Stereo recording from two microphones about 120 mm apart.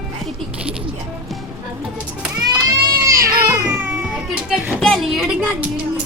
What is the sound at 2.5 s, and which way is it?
Baby cry, 30° right (ahead or behind).